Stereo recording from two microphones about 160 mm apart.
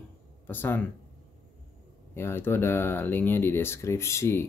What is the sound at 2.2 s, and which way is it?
Speech, 15° left (ahead or behind).